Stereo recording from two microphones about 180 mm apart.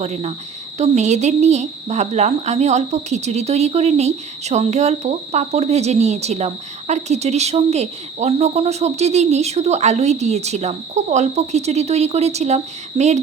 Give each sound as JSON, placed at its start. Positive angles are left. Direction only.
{"t": 0.0, "sound": "speech", "side_deg": -35}